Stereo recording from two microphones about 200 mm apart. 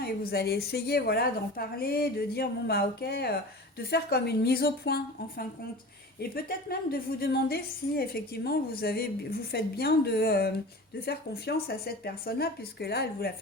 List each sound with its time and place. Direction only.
0.0 s a woman's voice: 50° left (ahead or behind)